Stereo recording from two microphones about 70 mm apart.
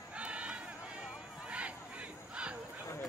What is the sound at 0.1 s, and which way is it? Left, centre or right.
Battle cry, centre.